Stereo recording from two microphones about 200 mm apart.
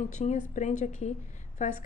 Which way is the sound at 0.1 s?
35° left (ahead or behind).